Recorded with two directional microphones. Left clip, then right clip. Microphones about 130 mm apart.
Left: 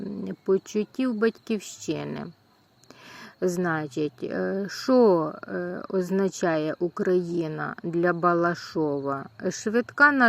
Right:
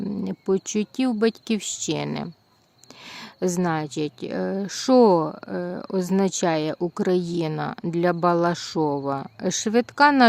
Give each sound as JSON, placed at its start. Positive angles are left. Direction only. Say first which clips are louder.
{"t": 0.3, "sound": "speech", "louder": "even", "side_deg": -45}